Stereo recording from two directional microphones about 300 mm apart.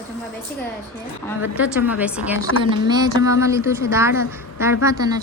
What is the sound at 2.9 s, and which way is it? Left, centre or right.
A woman's voice, centre.